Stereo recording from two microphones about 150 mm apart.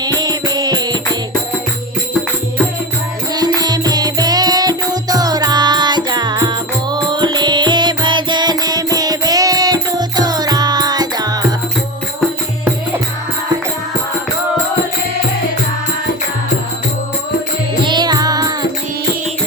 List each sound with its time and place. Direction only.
0.0 s music: 25° right (ahead or behind)
3.3 s music: 25° right (ahead or behind)
17.8 s music: 30° right (ahead or behind)